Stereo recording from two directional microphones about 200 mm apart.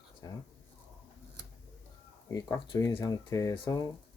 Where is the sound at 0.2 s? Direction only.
20° left (ahead or behind).